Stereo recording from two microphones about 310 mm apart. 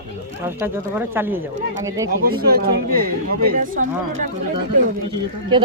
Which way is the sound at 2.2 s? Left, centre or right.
Right.